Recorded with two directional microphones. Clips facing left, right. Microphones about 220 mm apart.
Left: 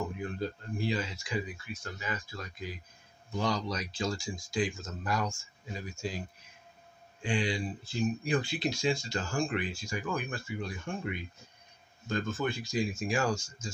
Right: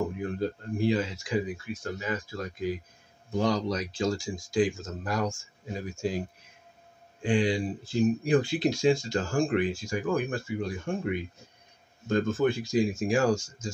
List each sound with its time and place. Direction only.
0.2 s speech: 50° right (ahead or behind)
13.1 s speech: 40° right (ahead or behind)